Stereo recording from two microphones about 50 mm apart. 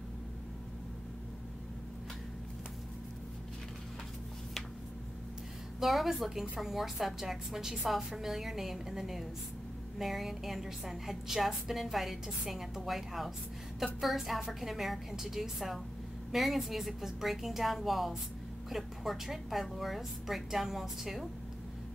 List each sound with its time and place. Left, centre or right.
5.8 s a woman's voice: centre